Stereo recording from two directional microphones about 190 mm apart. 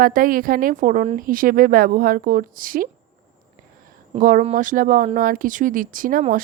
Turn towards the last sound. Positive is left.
turn(degrees=-45)  # may be behind; listen again after turning